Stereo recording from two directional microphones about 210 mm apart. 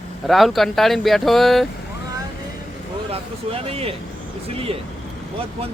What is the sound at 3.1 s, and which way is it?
Speech, 30° right (ahead or behind).